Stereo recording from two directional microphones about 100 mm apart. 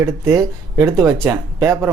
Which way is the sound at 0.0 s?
30° right (ahead or behind).